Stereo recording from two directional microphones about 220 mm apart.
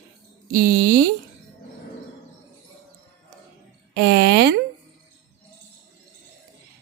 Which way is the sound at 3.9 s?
50° right (ahead or behind).